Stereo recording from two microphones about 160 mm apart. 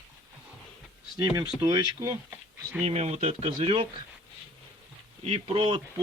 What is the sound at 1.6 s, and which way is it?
Speech, 20° right (ahead or behind).